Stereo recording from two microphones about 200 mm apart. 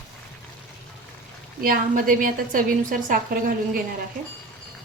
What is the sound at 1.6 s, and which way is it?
A woman's voice, 45° right (ahead or behind).